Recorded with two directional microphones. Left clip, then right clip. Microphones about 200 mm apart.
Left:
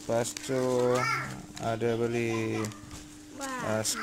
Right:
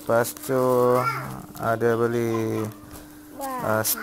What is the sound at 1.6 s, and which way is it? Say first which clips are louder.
Speech: right 8 dB; centre (ahead or behind).